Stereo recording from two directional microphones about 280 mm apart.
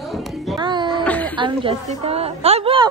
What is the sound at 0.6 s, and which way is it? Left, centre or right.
Music, centre.